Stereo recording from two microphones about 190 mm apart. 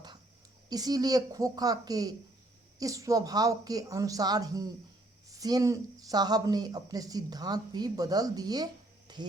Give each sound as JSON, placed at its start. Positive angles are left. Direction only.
{"t": 0.7, "sound": "speech", "side_deg": -20}